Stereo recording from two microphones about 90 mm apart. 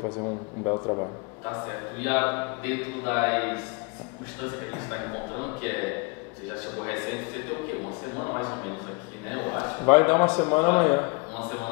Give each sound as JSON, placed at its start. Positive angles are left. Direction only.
{"t": 0.0, "sound": "a man's voice", "side_deg": 30}